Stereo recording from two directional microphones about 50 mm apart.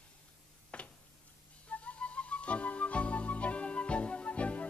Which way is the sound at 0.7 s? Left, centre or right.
Left.